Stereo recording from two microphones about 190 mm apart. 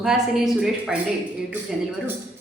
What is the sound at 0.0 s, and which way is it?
Speech, centre (ahead or behind).